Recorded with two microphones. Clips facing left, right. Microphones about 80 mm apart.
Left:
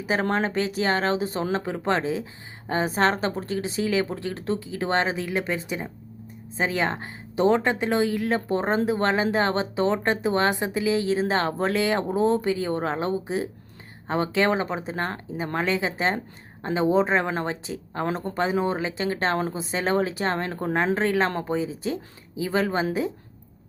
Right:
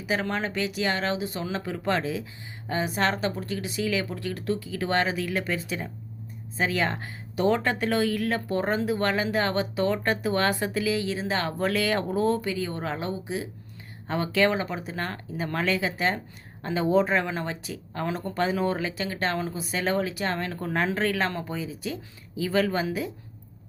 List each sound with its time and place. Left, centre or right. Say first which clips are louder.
0.0 s a woman's voice: left 4 dB; left